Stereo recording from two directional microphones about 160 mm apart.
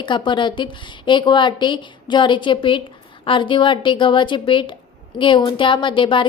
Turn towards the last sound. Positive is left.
turn(degrees=30)  # may be behind; listen again after turning